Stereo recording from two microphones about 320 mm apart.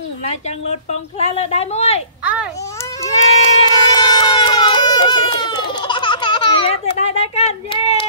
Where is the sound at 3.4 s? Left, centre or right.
Centre.